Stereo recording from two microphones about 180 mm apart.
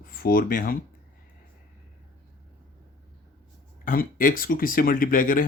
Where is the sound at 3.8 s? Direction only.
50° left (ahead or behind).